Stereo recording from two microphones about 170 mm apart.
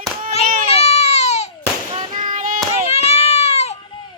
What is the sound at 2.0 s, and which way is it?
Child singing, 45° right (ahead or behind).